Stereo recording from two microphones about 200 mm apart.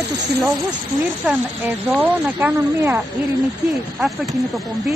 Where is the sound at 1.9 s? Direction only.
10° right (ahead or behind).